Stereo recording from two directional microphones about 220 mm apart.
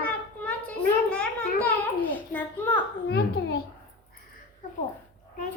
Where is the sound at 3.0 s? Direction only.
50° left (ahead or behind).